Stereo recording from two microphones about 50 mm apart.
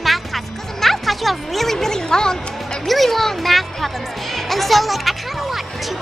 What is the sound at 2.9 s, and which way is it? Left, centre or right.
Speech, centre.